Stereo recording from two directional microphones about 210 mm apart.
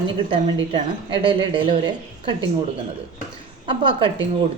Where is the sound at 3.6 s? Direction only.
25° right (ahead or behind).